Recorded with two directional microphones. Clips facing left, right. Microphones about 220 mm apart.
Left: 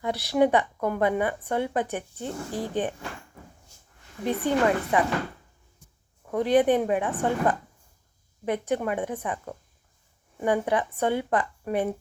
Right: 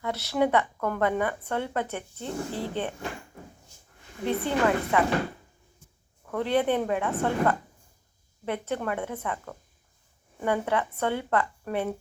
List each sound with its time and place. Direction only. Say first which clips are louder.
0.0 s speech: left 3 dB; 15° left (ahead or behind)
4.3 s speech: left 2 dB; 15° left (ahead or behind)
6.3 s speech: left 4 dB; 15° left (ahead or behind)